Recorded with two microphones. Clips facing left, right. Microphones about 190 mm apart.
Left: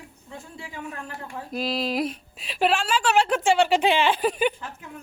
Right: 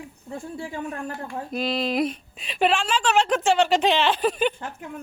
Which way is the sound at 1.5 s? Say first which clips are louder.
Right 1 dB; centre (ahead or behind).